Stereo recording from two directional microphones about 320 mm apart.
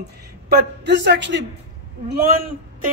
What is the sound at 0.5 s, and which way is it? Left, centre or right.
Speech, right.